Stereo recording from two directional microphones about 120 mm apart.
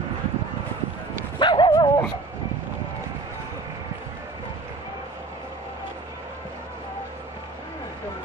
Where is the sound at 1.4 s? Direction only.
40° left (ahead or behind).